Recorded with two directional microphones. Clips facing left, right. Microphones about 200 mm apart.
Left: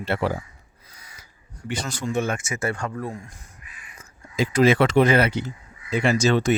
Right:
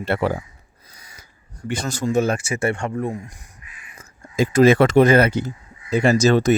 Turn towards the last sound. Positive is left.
turn(degrees=-40)  # may be behind; listen again after turning